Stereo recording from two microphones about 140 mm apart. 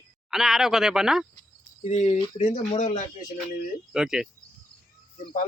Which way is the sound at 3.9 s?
5° right (ahead or behind).